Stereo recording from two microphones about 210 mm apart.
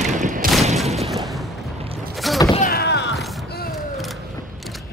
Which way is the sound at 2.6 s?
50° left (ahead or behind).